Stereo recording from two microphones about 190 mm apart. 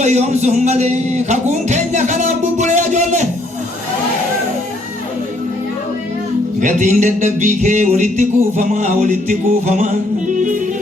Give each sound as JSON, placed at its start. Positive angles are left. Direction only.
{"t": 0.0, "sound": "music", "side_deg": -35}
{"t": 6.6, "sound": "speech", "side_deg": -40}
{"t": 10.3, "sound": "music", "side_deg": -40}